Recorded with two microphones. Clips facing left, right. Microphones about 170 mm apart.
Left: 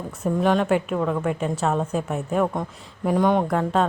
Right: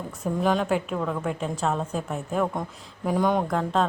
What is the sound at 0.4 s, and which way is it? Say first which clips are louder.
A woman's voice: left 3 dB; centre (ahead or behind).